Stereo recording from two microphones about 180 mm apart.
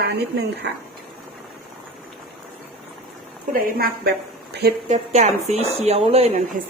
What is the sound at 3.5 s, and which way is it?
Speech, 55° right (ahead or behind).